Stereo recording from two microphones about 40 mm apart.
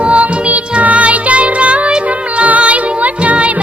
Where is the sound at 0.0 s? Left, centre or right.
Right.